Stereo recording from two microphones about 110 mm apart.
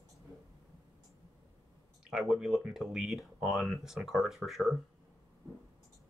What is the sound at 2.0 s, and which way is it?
Speech, 5° right (ahead or behind).